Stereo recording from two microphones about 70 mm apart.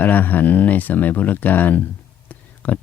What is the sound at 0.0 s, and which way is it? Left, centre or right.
Speech, left.